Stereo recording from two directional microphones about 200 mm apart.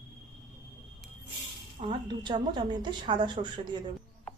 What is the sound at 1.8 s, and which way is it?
A woman's voice, 20° right (ahead or behind).